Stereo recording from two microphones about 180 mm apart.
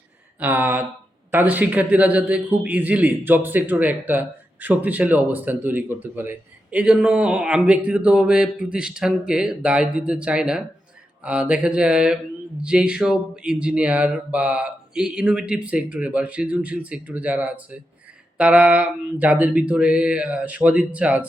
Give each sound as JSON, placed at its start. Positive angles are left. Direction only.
{"t": 0.3, "sound": "a man's voice", "side_deg": -10}